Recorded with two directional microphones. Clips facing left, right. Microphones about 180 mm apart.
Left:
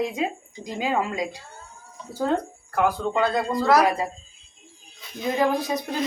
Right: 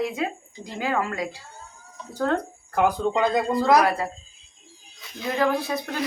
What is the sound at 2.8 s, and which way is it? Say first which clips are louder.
Speech: right 1 dB; 15° right (ahead or behind).